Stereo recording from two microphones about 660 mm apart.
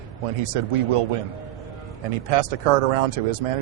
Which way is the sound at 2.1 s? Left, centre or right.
Right.